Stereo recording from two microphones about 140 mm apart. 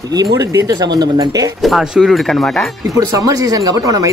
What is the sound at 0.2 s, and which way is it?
A woman's voice, 25° right (ahead or behind).